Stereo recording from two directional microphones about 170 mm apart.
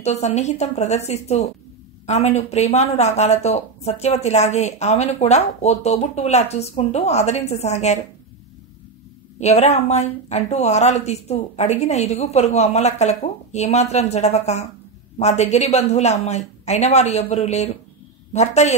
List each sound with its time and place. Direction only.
0.0 s speech: 40° left (ahead or behind)
9.4 s speech: 40° left (ahead or behind)